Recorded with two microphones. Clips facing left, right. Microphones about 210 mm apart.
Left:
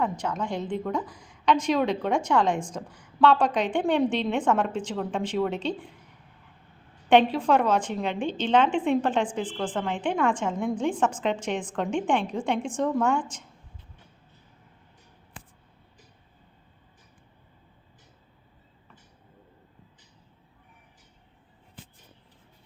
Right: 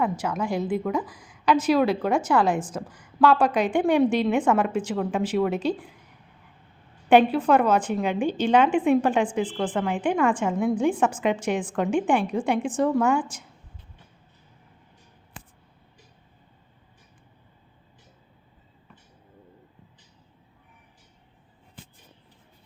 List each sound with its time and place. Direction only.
0.0 s a woman's voice: 5° right (ahead or behind)
7.1 s a woman's voice: 5° right (ahead or behind)